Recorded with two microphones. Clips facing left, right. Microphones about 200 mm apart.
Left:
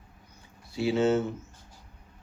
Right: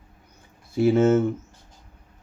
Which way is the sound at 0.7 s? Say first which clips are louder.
Right 6 dB; 50° right (ahead or behind).